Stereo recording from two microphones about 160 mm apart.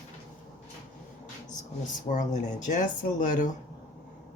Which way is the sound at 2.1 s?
50° left (ahead or behind).